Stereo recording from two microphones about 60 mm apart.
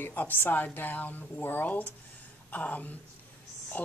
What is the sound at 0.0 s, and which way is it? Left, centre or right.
A woman's voice, left.